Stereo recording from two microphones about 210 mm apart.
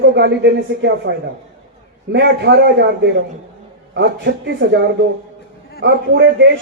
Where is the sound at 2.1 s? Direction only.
50° right (ahead or behind).